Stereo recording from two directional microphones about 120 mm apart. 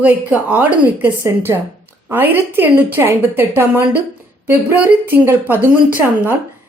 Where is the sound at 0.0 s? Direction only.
15° right (ahead or behind).